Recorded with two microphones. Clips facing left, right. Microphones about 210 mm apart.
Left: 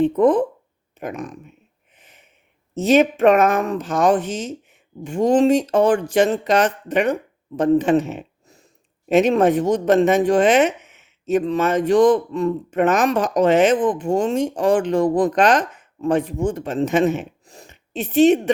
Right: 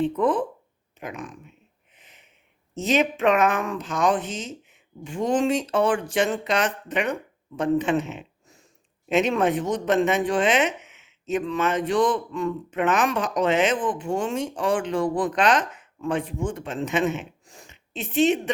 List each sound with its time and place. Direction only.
0.0 s speech: 40° left (ahead or behind)
2.0 s a sound: 50° left (ahead or behind)
2.8 s speech: 50° left (ahead or behind)